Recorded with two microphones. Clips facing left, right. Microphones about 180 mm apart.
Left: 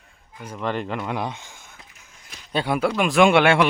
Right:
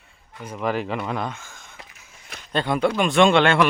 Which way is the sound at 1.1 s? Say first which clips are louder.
Even; 15° left (ahead or behind).